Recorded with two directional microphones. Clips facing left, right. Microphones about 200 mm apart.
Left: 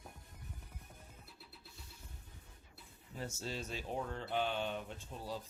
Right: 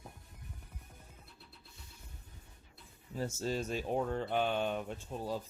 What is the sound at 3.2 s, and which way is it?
Speech, 45° right (ahead or behind).